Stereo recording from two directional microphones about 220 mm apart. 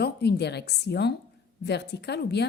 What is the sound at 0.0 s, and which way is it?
Speech, 50° left (ahead or behind).